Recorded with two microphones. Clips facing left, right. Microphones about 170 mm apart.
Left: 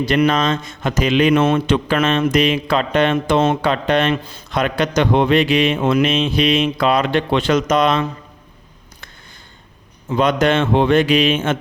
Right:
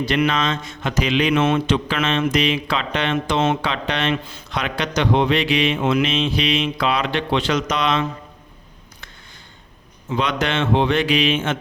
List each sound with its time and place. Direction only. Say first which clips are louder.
0.0 s a man's voice: left 4 dB; 45° left (ahead or behind)
10.1 s a man's voice: left 6 dB; 45° left (ahead or behind)